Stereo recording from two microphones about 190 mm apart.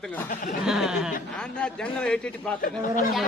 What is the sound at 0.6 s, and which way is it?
A man's voice, centre (ahead or behind).